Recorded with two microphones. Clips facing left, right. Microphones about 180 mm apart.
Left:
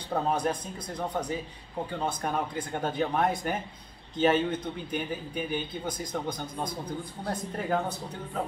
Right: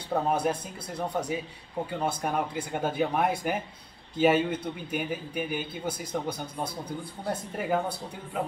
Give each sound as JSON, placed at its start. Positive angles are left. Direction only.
{"t": 0.1, "sound": "a man's voice", "side_deg": -10}